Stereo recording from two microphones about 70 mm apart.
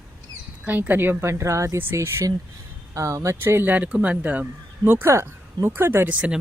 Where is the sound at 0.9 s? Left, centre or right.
Right.